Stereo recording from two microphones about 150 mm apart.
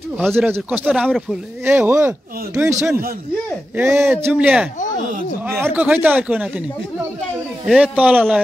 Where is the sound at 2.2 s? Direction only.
80° right.